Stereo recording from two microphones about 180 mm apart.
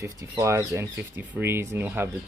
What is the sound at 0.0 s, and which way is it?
Speech, 15° right (ahead or behind).